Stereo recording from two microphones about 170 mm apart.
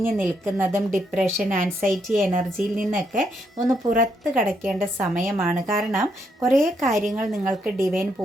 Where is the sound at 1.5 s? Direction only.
50° right (ahead or behind).